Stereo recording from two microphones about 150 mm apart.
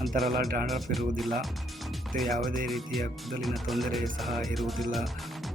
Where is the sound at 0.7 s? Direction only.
Centre (ahead or behind).